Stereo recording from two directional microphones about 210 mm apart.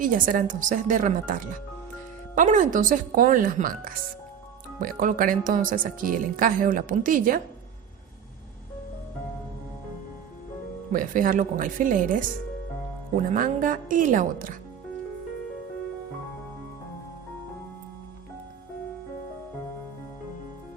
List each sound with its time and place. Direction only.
0.0 s a woman's voice: 40° right (ahead or behind)
10.9 s a woman's voice: 40° right (ahead or behind)
13.1 s a woman's voice: 40° right (ahead or behind)